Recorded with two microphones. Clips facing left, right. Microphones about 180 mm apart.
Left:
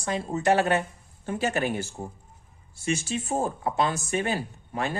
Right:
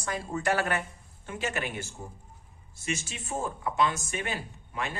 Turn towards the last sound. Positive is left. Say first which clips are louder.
# left 5 dB
turn(degrees=40)  # may be behind; listen again after turning